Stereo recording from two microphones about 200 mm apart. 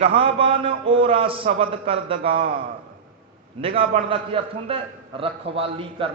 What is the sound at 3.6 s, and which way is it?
A man's voice, 30° right (ahead or behind).